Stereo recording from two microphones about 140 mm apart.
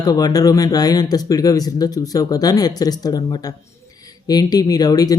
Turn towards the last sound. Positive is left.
turn(degrees=25)  # may be behind; listen again after turning